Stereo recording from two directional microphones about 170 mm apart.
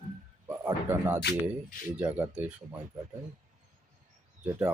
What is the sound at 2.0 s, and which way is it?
Speech, 5° right (ahead or behind).